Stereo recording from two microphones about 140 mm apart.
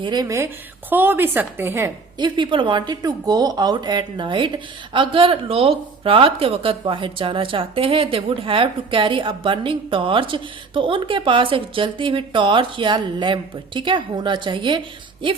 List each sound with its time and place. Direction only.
0.0 s speech: 30° right (ahead or behind)
0.9 s a woman's voice: 15° right (ahead or behind)
2.1 s speech: 35° right (ahead or behind)